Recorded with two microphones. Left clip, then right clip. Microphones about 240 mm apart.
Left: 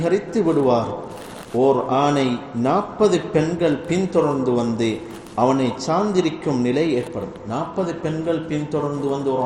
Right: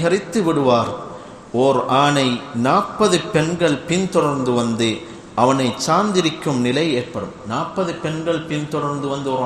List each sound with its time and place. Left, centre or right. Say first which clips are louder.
0.0 s a man's voice: right 1 dB; right